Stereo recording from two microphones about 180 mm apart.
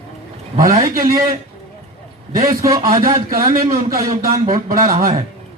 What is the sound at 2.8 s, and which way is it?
A man's voice, 50° right (ahead or behind).